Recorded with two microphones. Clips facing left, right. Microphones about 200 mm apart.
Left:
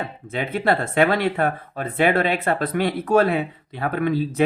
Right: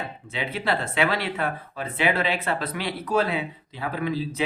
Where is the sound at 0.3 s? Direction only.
50° left (ahead or behind).